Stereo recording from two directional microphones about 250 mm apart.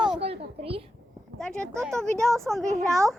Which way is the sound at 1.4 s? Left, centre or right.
Centre.